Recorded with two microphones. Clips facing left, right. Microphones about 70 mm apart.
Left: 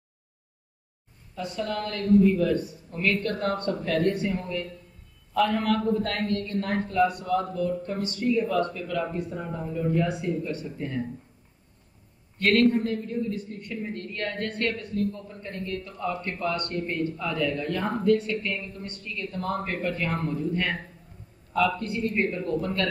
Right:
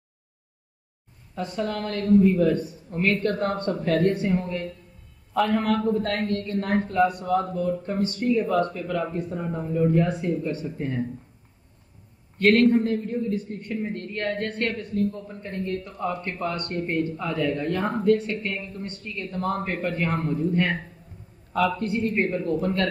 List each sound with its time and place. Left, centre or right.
1.3 s a woman's voice: right
12.7 s a woman's voice: right
21.7 s a woman's voice: right